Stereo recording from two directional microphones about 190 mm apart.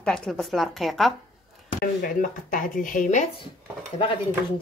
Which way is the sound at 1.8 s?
50° left (ahead or behind).